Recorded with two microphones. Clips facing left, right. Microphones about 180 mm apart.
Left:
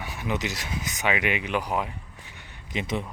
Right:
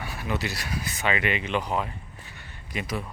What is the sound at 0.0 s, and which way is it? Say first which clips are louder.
Speech: left 1 dB; 15° left (ahead or behind).